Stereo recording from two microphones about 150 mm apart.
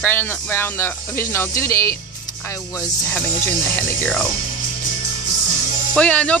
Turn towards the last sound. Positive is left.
turn(degrees=10)  # may be behind; listen again after turning